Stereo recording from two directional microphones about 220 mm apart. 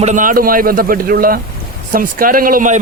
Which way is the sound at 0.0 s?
35° right (ahead or behind).